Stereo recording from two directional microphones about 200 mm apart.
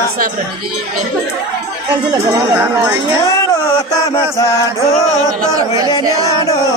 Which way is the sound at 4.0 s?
15° left (ahead or behind).